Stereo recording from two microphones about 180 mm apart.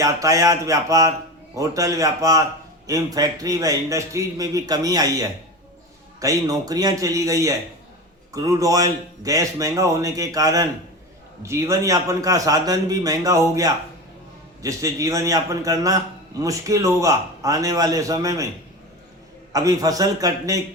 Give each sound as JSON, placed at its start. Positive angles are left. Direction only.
{"t": 0.0, "sound": "a sound", "side_deg": -20}
{"t": 2.8, "sound": "a man's voice", "side_deg": -20}
{"t": 19.5, "sound": "a man's voice", "side_deg": -20}